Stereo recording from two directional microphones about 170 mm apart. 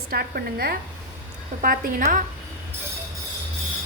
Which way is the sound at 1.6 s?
55° right (ahead or behind).